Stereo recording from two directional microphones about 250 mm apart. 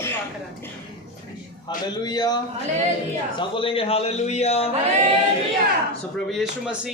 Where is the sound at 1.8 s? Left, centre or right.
Centre.